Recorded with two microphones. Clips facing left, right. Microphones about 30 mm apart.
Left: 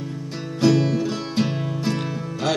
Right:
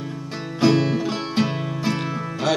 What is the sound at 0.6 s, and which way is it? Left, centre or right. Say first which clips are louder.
Music: even; centre.